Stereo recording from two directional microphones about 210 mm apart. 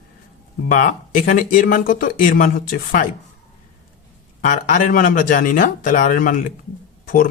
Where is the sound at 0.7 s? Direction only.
40° left (ahead or behind).